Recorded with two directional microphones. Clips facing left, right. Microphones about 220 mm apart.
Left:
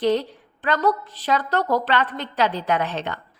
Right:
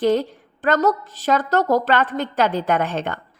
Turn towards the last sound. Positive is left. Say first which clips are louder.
# right 3 dB
turn(degrees=-50)  # may be behind; listen again after turning